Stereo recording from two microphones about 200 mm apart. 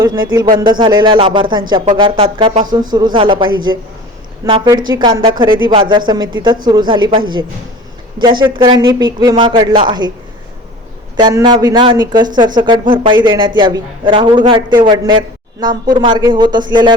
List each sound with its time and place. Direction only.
0.0 s speech: 20° right (ahead or behind)
11.2 s speech: 20° right (ahead or behind)